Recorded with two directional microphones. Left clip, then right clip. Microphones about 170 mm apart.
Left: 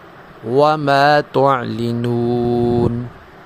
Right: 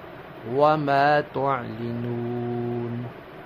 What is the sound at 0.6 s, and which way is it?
Speech, 50° left (ahead or behind).